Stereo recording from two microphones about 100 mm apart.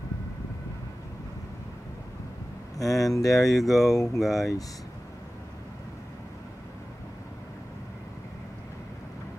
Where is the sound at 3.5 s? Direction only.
Centre (ahead or behind).